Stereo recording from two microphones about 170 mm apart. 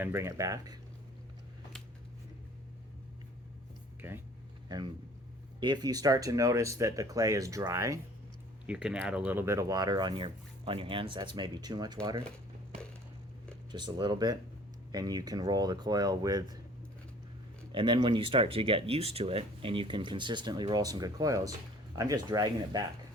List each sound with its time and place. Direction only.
0.0 s speech: 15° right (ahead or behind)
4.0 s speech: 15° right (ahead or behind)
5.5 s speech: 25° right (ahead or behind)
8.6 s speech: 5° right (ahead or behind); by 11.9 s 25° right (ahead or behind)
13.7 s speech: 25° right (ahead or behind)
17.7 s speech: 25° right (ahead or behind)